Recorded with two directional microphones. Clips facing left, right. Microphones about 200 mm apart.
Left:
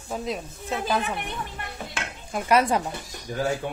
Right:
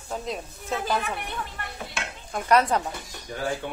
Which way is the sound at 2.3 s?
10° left (ahead or behind).